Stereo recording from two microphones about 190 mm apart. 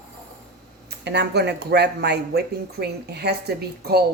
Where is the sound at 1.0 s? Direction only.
60° right (ahead or behind).